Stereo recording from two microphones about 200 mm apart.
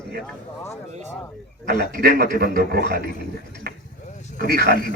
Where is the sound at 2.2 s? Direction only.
50° right (ahead or behind).